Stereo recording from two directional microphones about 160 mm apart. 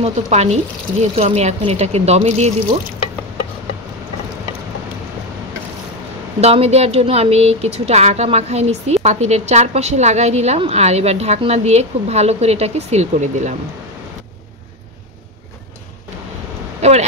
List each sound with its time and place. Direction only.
0.0 s a woman's voice: 45° right (ahead or behind)
6.4 s speech: 40° right (ahead or behind)
16.8 s a sound: 45° right (ahead or behind)